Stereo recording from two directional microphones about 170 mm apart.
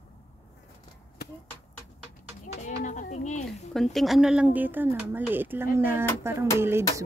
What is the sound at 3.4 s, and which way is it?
Speech, centre (ahead or behind).